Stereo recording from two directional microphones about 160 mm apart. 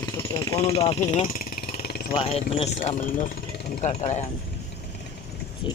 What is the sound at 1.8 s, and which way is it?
Vehicle, 75° left (ahead or behind).